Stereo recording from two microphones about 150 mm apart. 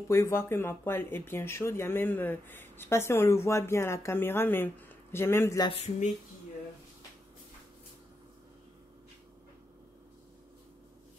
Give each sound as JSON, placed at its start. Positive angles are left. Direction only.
{"t": 0.1, "sound": "speech", "side_deg": 15}
{"t": 5.8, "sound": "speech", "side_deg": 50}